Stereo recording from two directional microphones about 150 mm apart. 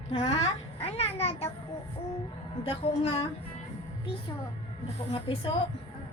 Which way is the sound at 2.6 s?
40° left (ahead or behind).